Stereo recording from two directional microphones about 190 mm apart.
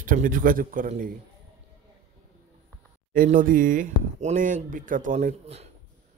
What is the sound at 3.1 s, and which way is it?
Speech, 45° right (ahead or behind).